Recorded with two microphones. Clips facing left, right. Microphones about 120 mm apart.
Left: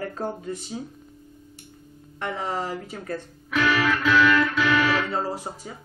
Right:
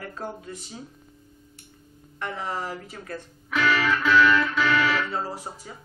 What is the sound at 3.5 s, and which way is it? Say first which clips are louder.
Music: left 1 dB; 15° left (ahead or behind).